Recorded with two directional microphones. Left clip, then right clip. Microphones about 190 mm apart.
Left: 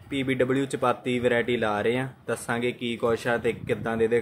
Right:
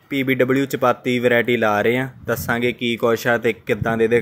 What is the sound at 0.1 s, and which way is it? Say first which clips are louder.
Speech: right 7 dB; 25° right (ahead or behind).